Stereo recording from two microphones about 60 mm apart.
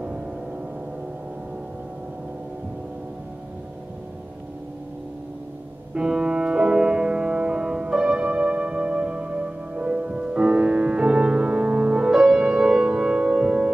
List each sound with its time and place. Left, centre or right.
5.9 s music: centre